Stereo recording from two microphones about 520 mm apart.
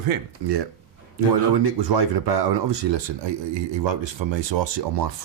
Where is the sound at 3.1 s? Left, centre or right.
Right.